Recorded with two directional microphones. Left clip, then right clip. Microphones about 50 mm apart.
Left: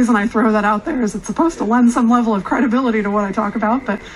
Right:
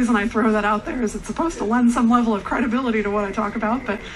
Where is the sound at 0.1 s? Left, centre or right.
Left.